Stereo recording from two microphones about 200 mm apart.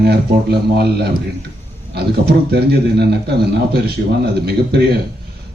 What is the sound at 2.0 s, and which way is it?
A man's voice, 55° right (ahead or behind).